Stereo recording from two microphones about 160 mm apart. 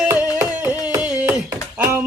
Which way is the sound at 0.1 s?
15° right (ahead or behind).